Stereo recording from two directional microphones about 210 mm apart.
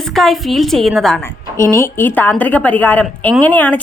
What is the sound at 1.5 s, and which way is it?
A woman's voice, 15° left (ahead or behind).